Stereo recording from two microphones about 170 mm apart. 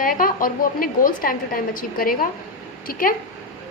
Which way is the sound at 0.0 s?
55° left (ahead or behind).